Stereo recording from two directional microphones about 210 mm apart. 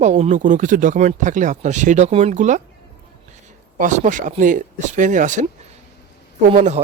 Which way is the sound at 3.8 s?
35° right (ahead or behind).